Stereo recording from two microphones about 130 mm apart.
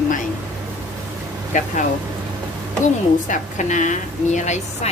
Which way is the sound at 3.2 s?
75° left (ahead or behind).